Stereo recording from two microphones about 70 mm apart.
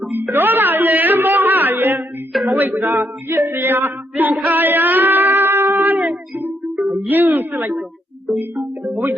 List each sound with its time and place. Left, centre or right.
0.1 s a sound: right
2.5 s female singing: right
4.4 s a sound: right
6.7 s music: centre
7.1 s a woman's voice: right
8.4 s music: right